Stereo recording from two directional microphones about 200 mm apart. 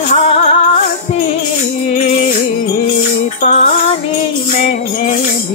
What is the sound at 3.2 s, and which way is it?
Music, 35° left (ahead or behind).